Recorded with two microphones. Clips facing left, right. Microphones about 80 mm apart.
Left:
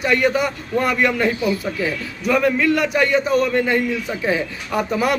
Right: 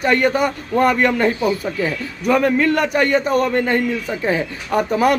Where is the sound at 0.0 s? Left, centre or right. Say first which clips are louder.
Right 2 dB; right.